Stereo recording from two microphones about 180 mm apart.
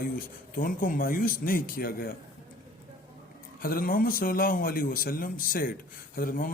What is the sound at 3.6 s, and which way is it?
A man's voice, 50° left (ahead or behind).